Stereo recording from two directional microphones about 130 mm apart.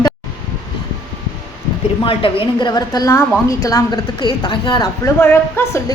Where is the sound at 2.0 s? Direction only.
45° left (ahead or behind).